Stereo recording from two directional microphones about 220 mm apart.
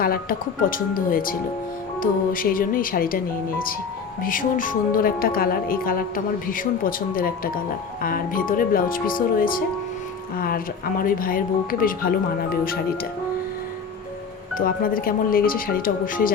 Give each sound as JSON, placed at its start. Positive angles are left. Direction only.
{"t": 0.0, "sound": "speech", "side_deg": 40}
{"t": 4.2, "sound": "speech", "side_deg": 40}
{"t": 14.6, "sound": "speech", "side_deg": 40}